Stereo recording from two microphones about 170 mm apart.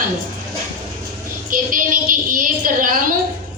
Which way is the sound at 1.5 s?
55° right (ahead or behind).